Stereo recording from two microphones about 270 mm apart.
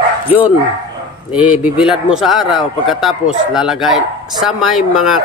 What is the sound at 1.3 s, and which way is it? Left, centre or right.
A man's voice, centre.